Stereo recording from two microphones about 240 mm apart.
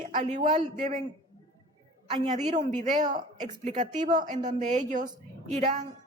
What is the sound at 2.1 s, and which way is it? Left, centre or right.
A woman's voice, right.